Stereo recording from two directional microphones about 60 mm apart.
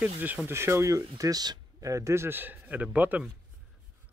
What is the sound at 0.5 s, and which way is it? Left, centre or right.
A man's voice, right.